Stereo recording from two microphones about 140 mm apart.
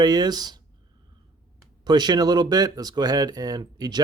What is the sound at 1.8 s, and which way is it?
Speech, 30° right (ahead or behind).